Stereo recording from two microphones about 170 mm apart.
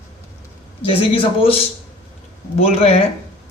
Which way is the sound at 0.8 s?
35° left (ahead or behind).